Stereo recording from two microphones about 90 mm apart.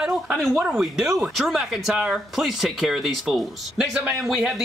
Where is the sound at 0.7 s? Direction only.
5° right (ahead or behind).